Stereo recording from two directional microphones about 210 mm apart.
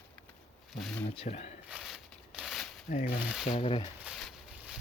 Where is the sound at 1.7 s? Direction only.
5° right (ahead or behind).